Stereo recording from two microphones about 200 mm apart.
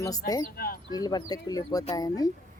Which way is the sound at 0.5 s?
50° left (ahead or behind).